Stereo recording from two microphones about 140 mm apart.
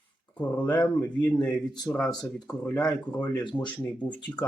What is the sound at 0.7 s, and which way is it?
Speech, 30° left (ahead or behind).